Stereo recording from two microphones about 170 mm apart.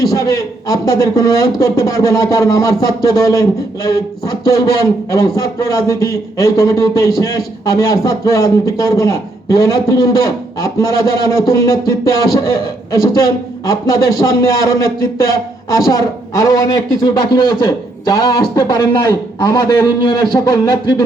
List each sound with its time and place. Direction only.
0.0 s a man's voice: 20° left (ahead or behind)
11.3 s a man's voice: 20° left (ahead or behind)